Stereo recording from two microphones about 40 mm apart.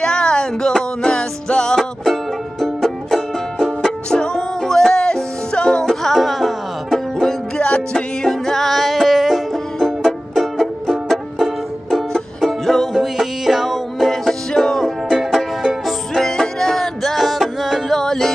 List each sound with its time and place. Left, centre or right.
0.0 s music: centre
2.6 s music: centre
3.8 s music: centre
5.0 s music: left
5.8 s music: centre
7.5 s music: left
8.3 s music: centre
9.8 s music: centre
11.9 s music: centre
15.6 s music: centre
16.1 s music: centre
17.8 s music: centre